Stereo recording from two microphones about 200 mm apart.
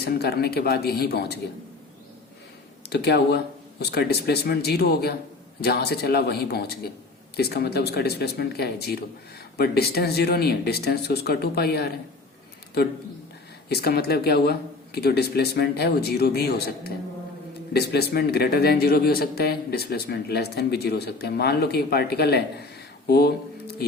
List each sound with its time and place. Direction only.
0.0 s a man's voice: 50° left (ahead or behind)
2.9 s a man's voice: 55° left (ahead or behind)
13.7 s a man's voice: 55° left (ahead or behind)